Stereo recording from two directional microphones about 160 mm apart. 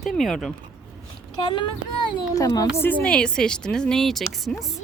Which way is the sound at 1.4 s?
30° left (ahead or behind).